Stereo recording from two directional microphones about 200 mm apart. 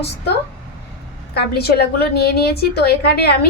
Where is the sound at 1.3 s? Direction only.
50° left (ahead or behind).